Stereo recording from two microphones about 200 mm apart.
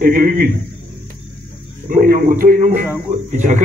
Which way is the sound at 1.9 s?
45° right (ahead or behind).